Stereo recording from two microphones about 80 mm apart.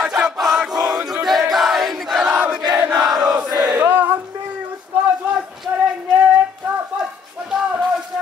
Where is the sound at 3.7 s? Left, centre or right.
Right.